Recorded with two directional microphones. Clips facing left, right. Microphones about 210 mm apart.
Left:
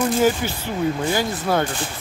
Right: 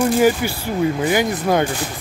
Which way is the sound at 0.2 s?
10° right (ahead or behind).